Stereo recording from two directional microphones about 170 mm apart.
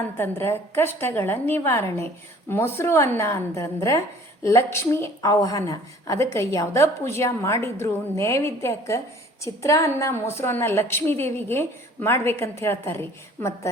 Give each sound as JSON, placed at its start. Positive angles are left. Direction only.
{"t": 0.2, "sound": "a woman's voice", "side_deg": 15}